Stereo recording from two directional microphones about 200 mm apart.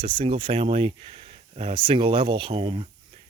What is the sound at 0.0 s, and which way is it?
Speech, 25° right (ahead or behind).